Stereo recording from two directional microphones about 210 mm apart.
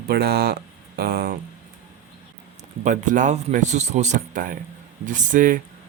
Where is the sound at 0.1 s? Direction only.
50° right (ahead or behind).